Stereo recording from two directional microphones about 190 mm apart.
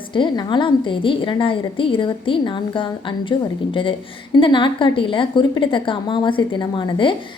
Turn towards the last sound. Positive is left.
turn(degrees=25)  # may be behind; listen again after turning